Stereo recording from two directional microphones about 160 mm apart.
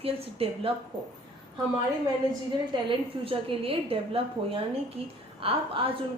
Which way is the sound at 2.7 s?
35° right (ahead or behind).